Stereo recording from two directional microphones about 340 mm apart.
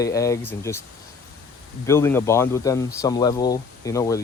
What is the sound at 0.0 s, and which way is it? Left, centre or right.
Speech, centre.